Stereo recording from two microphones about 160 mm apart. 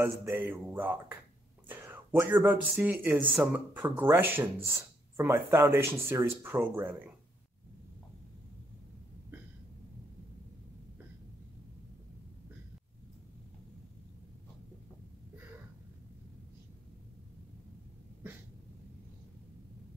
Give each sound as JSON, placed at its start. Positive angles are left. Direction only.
{"t": 0.0, "sound": "speech", "side_deg": -15}